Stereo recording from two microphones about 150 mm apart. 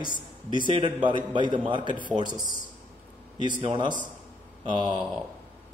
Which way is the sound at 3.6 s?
35° right (ahead or behind).